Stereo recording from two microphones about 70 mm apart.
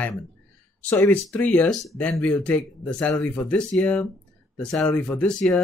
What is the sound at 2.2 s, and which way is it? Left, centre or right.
Speech, centre.